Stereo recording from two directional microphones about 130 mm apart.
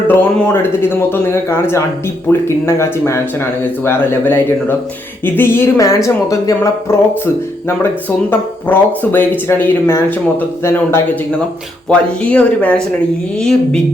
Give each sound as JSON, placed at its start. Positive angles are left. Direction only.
{"t": 0.1, "sound": "speech", "side_deg": 15}
{"t": 2.6, "sound": "speech", "side_deg": 20}
{"t": 8.3, "sound": "speech", "side_deg": 15}
{"t": 11.9, "sound": "speech", "side_deg": 10}